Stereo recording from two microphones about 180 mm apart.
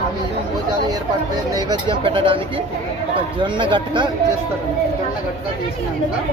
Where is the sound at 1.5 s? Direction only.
25° right (ahead or behind).